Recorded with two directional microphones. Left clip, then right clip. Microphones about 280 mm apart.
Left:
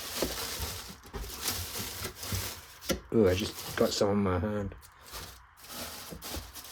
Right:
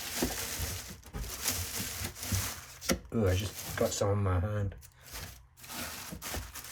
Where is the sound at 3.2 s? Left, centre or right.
Left.